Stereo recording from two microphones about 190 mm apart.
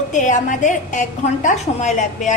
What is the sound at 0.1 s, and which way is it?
A woman's voice, 40° left (ahead or behind).